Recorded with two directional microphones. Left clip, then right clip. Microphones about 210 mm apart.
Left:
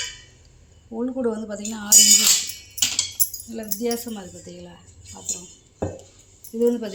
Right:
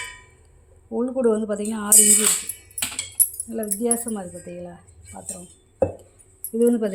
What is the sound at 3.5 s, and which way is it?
Speech, 50° right (ahead or behind).